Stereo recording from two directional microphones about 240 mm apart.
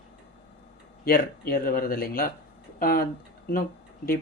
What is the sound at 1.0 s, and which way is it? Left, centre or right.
Speech, left.